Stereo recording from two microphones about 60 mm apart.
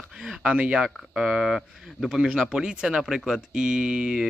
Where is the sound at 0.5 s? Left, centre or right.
Centre.